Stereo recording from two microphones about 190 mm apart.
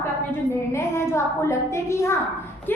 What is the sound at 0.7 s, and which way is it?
A woman's voice, 15° left (ahead or behind).